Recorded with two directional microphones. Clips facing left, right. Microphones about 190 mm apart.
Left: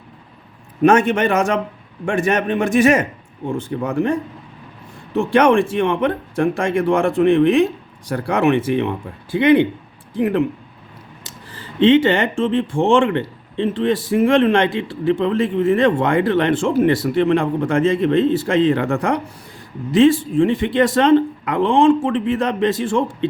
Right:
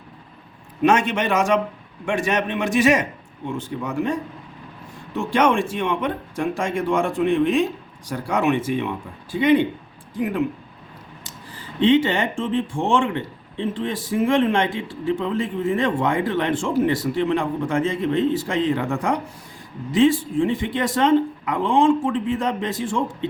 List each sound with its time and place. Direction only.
0.8 s a man's voice: 50° left (ahead or behind); by 10.4 s 65° left (ahead or behind)
11.5 s speech: 70° left (ahead or behind)